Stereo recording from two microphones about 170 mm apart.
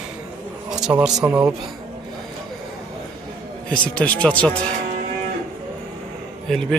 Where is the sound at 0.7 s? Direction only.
5° right (ahead or behind).